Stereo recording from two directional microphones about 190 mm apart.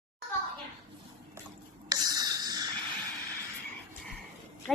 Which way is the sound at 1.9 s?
20° right (ahead or behind).